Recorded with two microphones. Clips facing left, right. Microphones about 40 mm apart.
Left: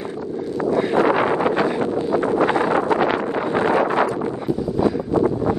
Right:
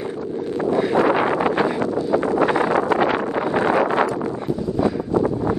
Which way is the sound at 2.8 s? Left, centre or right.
Right.